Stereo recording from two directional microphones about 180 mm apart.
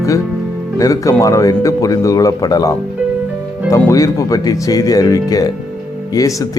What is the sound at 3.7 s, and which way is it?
Speech, 20° left (ahead or behind).